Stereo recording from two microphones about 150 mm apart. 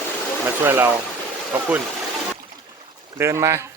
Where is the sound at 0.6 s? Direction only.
15° right (ahead or behind).